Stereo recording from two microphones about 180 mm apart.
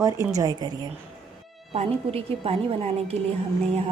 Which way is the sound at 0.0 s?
15° right (ahead or behind).